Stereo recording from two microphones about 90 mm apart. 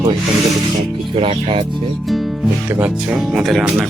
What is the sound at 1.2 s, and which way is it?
Speech, 90° right.